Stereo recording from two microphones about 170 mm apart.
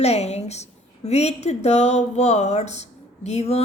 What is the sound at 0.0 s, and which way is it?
A woman's voice, 40° left (ahead or behind).